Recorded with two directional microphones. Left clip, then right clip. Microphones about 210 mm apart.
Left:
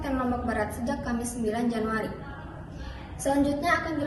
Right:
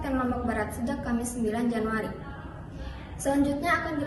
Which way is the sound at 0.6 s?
30° left (ahead or behind).